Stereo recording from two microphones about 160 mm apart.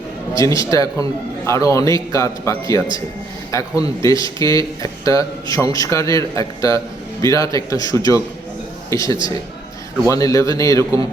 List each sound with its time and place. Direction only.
0.3 s speech: 20° left (ahead or behind)